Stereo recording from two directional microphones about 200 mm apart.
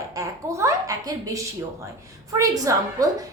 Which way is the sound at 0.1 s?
15° right (ahead or behind).